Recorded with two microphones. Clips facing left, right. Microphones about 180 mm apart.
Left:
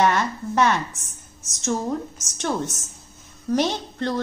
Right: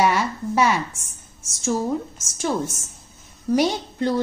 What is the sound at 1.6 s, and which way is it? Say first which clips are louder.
A woman's voice: right 2 dB; 5° right (ahead or behind).